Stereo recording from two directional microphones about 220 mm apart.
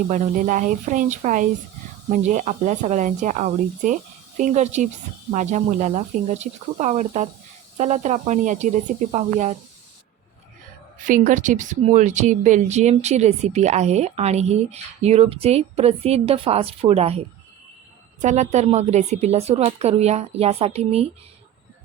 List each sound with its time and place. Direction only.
0.1 s speech: 35° right (ahead or behind)
11.0 s speech: 35° right (ahead or behind)